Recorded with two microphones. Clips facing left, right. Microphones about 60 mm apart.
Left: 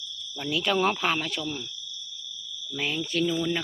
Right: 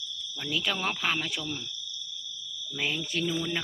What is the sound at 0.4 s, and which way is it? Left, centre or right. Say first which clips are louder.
Speech: left 6 dB; centre.